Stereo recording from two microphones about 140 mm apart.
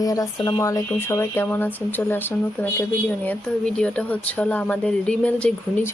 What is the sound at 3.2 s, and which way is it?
Speech, 10° left (ahead or behind).